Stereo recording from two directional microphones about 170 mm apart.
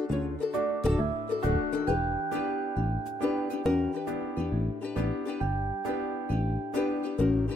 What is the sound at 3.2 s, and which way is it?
Music, 5° left (ahead or behind).